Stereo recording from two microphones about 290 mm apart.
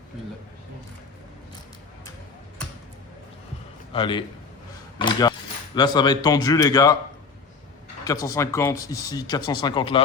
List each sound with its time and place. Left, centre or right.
3.9 s speech: centre
8.0 s speech: centre